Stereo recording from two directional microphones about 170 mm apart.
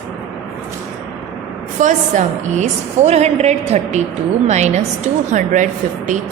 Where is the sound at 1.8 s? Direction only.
45° right (ahead or behind).